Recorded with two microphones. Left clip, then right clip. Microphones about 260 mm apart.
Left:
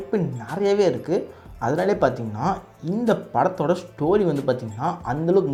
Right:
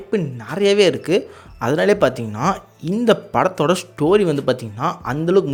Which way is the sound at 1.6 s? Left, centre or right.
Right.